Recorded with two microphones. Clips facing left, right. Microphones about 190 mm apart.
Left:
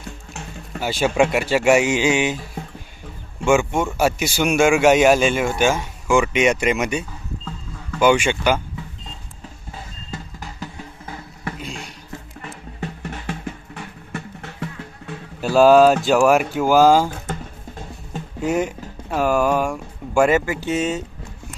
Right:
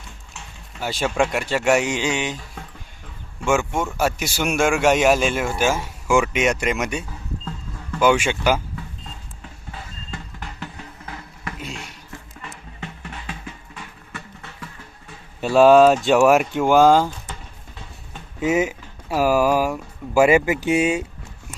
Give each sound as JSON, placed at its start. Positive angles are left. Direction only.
{"t": 0.8, "sound": "speech", "side_deg": 0}
{"t": 3.4, "sound": "speech", "side_deg": 0}
{"t": 10.6, "sound": "music", "side_deg": 30}
{"t": 13.2, "sound": "music", "side_deg": 55}
{"t": 15.4, "sound": "speech", "side_deg": 0}
{"t": 18.3, "sound": "speech", "side_deg": 0}